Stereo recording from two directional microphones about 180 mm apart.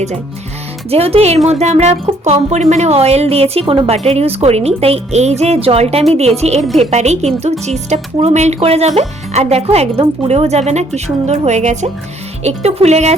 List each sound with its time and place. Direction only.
0.9 s speech: 35° right (ahead or behind)